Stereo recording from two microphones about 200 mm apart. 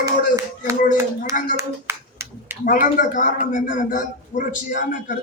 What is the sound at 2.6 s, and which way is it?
A man's voice, 45° left (ahead or behind).